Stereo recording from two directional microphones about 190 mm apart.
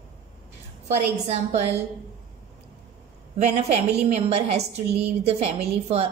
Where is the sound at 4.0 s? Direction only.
35° right (ahead or behind).